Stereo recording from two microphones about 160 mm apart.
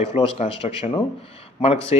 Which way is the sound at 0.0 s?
40° left (ahead or behind).